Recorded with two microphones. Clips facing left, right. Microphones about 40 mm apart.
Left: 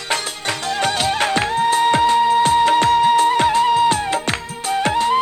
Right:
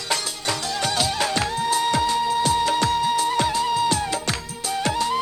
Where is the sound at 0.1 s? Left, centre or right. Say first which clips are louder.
Left 3 dB; left.